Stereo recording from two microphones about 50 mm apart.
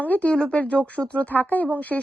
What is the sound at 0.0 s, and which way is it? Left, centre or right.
Speech, left.